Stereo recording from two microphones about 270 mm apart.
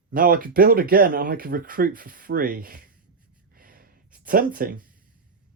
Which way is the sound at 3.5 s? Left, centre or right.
Right.